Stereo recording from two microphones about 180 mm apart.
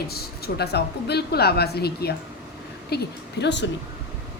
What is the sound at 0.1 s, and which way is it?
A woman's voice, 60° left (ahead or behind).